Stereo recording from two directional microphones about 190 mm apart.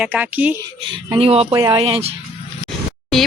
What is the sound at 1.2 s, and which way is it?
Speech, 30° right (ahead or behind).